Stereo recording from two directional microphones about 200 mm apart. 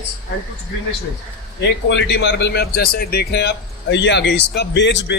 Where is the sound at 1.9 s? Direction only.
60° left (ahead or behind).